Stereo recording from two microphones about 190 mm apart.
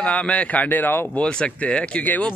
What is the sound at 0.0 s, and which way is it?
Speech, 5° left (ahead or behind).